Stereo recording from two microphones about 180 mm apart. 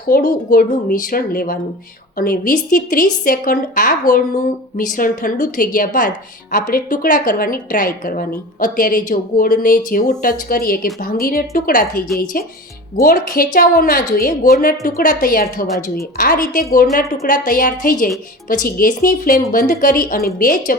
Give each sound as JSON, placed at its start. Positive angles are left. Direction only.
{"t": 0.1, "sound": "a woman's voice", "side_deg": 50}
{"t": 15.6, "sound": "a woman's voice", "side_deg": 0}
{"t": 16.1, "sound": "a woman's voice", "side_deg": 50}